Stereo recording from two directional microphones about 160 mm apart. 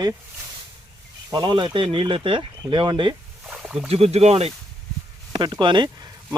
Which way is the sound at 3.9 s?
40° right (ahead or behind).